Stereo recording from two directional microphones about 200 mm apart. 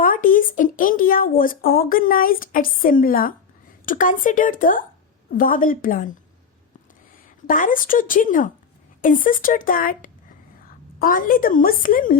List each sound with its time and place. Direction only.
0.0 s a woman's voice: 45° left (ahead or behind)
7.4 s speech: 40° left (ahead or behind)